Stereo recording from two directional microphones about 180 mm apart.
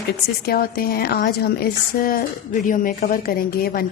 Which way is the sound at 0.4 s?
55° left (ahead or behind).